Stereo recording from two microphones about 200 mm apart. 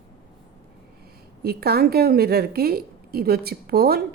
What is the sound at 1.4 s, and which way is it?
A woman's voice, 50° right (ahead or behind).